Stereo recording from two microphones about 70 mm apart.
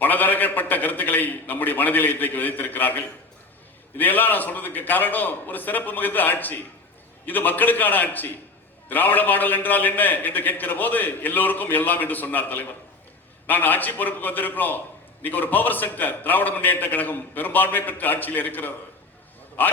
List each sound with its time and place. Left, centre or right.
0.0 s a man's voice: left